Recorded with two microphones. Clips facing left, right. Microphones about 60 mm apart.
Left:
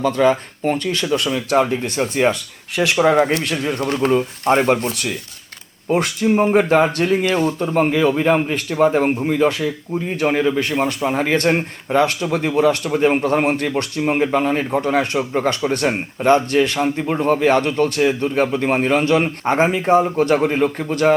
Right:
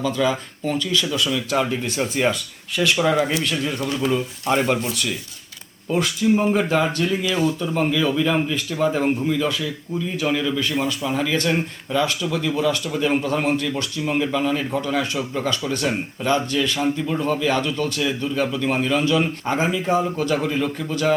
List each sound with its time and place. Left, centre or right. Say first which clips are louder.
0.0 s speech: left 6 dB; left
2.3 s speech: left 2 dB; left